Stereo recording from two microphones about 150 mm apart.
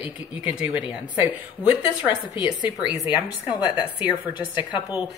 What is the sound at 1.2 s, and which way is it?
A woman's voice, 10° right (ahead or behind).